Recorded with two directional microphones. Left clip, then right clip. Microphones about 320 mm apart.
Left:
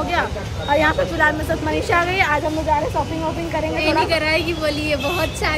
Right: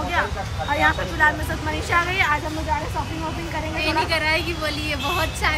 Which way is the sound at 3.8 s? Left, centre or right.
Centre.